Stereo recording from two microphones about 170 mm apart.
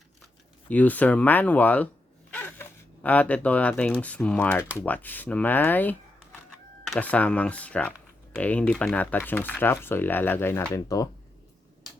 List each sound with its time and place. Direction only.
0.7 s speech: 10° left (ahead or behind)